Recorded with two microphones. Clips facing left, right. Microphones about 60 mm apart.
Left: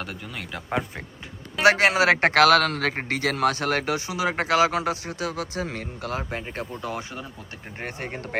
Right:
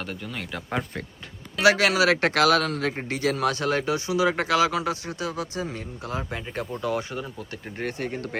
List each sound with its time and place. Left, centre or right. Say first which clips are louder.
0.0 s a man's voice: right 1 dB; centre
1.6 s a man's voice: left 1 dB; left
4.4 s speech: left 1 dB; left
5.4 s speech: left 1 dB; left
6.8 s a man's voice: right 4 dB; centre
7.8 s speech: right 3 dB; left